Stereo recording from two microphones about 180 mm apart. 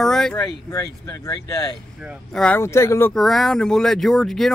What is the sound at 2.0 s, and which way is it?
Speech, centre (ahead or behind).